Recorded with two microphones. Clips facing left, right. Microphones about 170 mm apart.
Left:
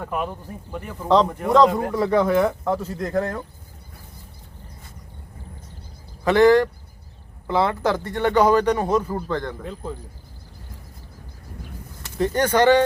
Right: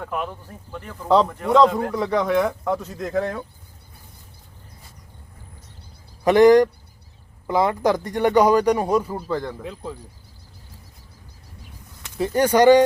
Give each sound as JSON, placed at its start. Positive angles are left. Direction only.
{"t": 0.0, "sound": "speech", "side_deg": 5}
{"t": 1.0, "sound": "speech", "side_deg": -5}
{"t": 6.2, "sound": "speech", "side_deg": -15}
{"t": 12.1, "sound": "speech", "side_deg": -10}